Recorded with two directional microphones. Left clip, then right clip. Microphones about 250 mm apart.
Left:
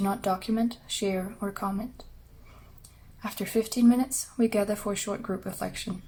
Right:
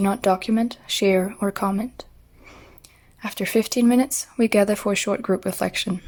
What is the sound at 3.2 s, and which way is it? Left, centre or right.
A woman's voice, right.